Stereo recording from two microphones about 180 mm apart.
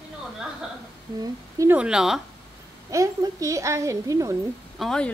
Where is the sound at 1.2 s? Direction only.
15° right (ahead or behind).